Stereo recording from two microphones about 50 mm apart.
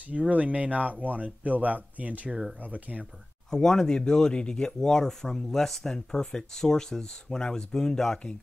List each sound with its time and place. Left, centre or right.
0.1 s speech: right
3.4 s speech: centre